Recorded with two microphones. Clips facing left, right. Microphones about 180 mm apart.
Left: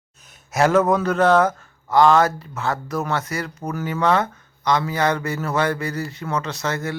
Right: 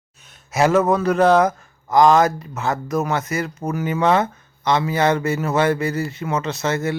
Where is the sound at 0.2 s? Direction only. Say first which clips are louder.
Right 1 dB; centre (ahead or behind).